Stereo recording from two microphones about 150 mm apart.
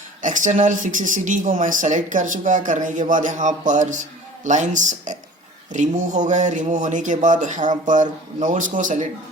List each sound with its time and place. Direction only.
0.2 s speech: 55° right (ahead or behind)